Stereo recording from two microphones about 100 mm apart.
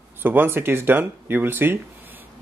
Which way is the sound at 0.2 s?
20° right (ahead or behind).